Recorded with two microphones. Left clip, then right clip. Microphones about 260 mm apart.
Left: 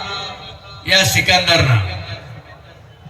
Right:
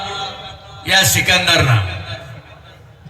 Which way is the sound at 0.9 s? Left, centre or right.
Centre.